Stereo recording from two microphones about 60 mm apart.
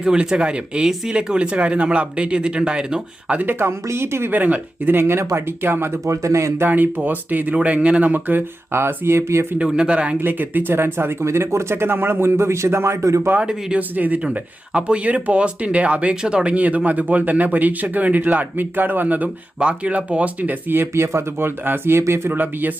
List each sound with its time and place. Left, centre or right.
0.0 s speech: centre
3.4 s speech: right
4.3 s speech: right
6.1 s speech: right
6.6 s speech: right
8.8 s speech: right
9.6 s speech: centre
10.2 s speech: right
13.4 s speech: centre
13.7 s speech: right
22.3 s speech: right